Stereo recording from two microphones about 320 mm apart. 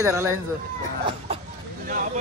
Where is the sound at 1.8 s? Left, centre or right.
Right.